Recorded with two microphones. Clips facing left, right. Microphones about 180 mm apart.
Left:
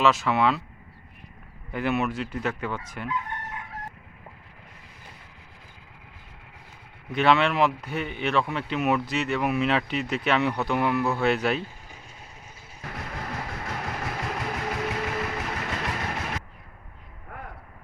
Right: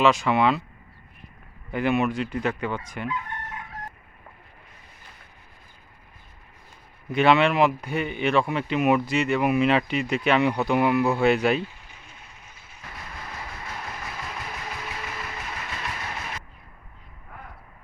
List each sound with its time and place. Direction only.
0.0 s speech: centre (ahead or behind)
1.7 s speech: 5° left (ahead or behind)
7.1 s speech: centre (ahead or behind)
12.9 s train: 65° left (ahead or behind)
13.8 s vehicle: 60° left (ahead or behind)